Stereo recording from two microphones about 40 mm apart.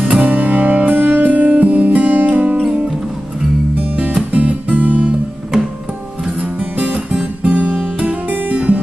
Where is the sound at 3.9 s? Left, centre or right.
Right.